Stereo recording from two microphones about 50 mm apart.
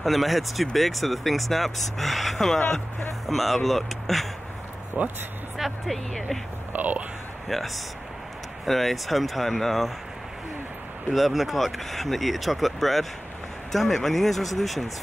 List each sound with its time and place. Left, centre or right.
0.0 s speech: centre
5.0 s speech: right
5.6 s speech: centre
6.7 s speech: right
7.4 s speech: centre
11.1 s speech: centre